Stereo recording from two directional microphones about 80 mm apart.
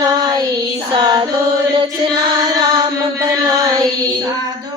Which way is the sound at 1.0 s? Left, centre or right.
Right.